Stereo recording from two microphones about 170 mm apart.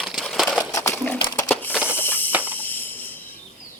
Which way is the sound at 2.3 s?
10° right (ahead or behind).